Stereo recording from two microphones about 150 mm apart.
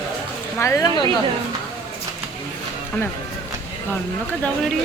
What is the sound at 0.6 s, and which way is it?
Speech, 20° left (ahead or behind).